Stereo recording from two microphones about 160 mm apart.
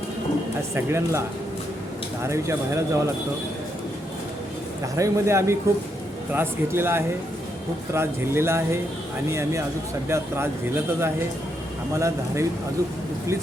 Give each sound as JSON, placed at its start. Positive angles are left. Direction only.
{"t": 0.7, "sound": "speech", "side_deg": -15}
{"t": 2.2, "sound": "speech", "side_deg": -15}
{"t": 4.9, "sound": "speech", "side_deg": -20}